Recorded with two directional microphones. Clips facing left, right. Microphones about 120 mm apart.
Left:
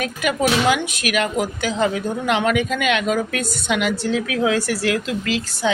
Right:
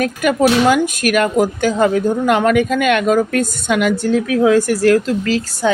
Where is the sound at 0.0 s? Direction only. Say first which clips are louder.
Right 6 dB; 45° right (ahead or behind).